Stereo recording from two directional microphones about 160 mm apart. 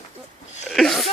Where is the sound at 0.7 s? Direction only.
Centre (ahead or behind).